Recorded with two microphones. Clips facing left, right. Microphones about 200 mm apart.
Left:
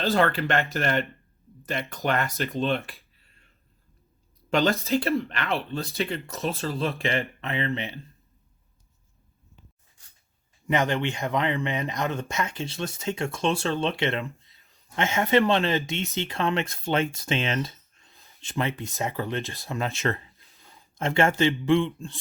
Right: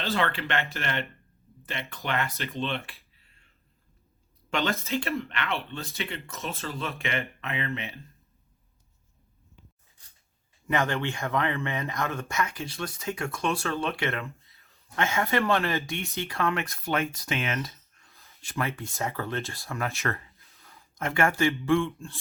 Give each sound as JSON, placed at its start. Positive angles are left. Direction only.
{"t": 0.0, "sound": "speech", "side_deg": 45}
{"t": 4.4, "sound": "speech", "side_deg": 35}
{"t": 10.7, "sound": "speech", "side_deg": 20}